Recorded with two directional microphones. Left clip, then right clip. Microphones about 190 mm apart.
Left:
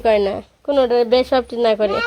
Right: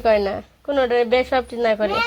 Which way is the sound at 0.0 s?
25° left (ahead or behind).